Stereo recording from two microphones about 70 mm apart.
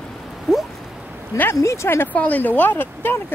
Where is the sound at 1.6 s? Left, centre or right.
Left.